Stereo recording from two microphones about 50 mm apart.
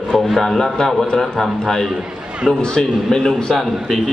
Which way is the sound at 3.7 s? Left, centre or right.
Centre.